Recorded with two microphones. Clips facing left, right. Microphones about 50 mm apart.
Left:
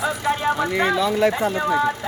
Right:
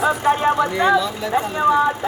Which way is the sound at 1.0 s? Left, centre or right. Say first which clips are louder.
Left 6 dB; left.